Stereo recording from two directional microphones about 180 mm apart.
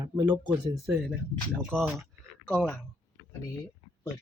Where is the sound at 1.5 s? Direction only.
Centre (ahead or behind).